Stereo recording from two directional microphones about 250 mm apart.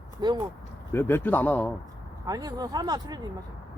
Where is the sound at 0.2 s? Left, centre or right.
Centre.